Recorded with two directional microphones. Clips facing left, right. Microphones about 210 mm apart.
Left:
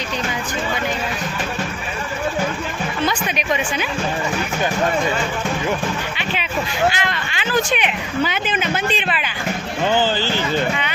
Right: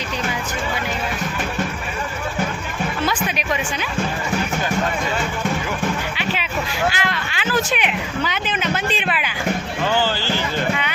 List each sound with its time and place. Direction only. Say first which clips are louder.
3.0 s speech: left 2 dB; 5° right (ahead or behind)
6.1 s speech: even; 5° right (ahead or behind)
9.0 s speech: even; 5° right (ahead or behind)
9.8 s a sound: left 3 dB; 20° left (ahead or behind)